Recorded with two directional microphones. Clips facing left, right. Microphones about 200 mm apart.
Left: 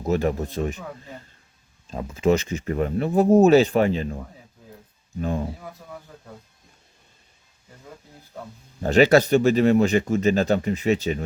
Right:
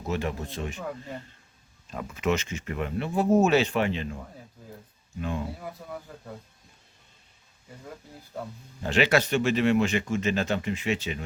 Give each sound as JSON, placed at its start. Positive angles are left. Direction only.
{"t": 0.1, "sound": "speech", "side_deg": 40}
{"t": 1.9, "sound": "speech", "side_deg": 30}
{"t": 5.5, "sound": "speech", "side_deg": -5}
{"t": 8.3, "sound": "speech", "side_deg": 0}
{"t": 8.8, "sound": "speech", "side_deg": 40}